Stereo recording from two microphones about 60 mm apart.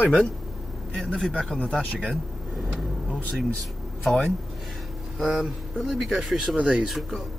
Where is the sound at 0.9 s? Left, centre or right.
Centre.